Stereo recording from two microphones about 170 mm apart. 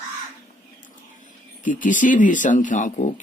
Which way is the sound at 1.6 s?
50° left (ahead or behind).